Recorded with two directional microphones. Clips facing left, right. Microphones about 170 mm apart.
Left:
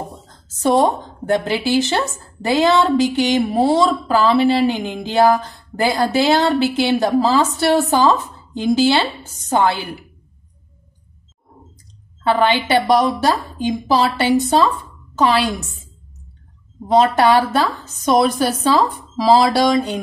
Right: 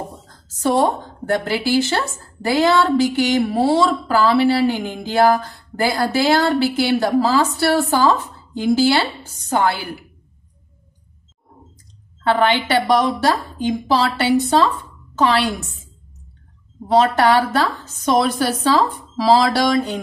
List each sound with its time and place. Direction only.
0.6 s speech: 20° left (ahead or behind)
12.2 s a woman's voice: 15° left (ahead or behind)
16.8 s a woman's voice: 15° left (ahead or behind)